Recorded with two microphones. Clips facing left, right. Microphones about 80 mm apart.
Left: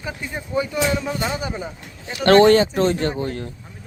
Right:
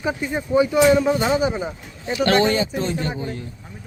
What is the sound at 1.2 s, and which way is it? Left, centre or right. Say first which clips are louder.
Speech: right 6 dB; right.